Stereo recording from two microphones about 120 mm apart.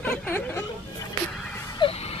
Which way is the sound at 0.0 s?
15° left (ahead or behind).